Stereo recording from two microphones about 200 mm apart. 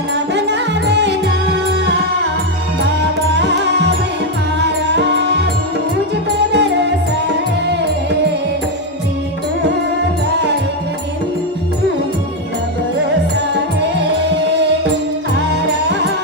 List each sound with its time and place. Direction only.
0.1 s music: 60° right (ahead or behind)
3.3 s music: 60° right (ahead or behind)
6.5 s music: 60° right (ahead or behind)
15.9 s music: 60° right (ahead or behind)